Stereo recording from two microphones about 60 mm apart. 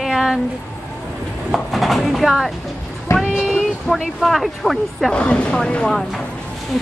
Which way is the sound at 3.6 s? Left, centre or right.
Centre.